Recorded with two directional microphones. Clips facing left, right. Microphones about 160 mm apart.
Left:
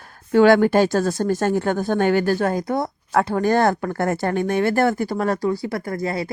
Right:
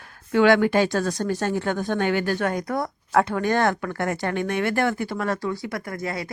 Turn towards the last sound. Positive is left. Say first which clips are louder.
# left 5 dB
turn(degrees=30)  # may be behind; listen again after turning